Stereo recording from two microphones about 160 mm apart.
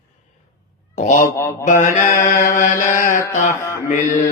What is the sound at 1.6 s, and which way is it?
Mantra, 55° left (ahead or behind).